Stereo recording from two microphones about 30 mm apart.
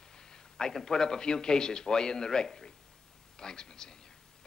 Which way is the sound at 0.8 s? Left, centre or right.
Centre.